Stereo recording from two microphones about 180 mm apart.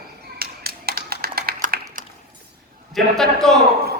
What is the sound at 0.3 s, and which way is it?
Tap, 60° right (ahead or behind).